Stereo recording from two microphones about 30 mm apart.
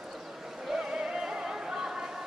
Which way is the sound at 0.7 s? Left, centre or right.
Right.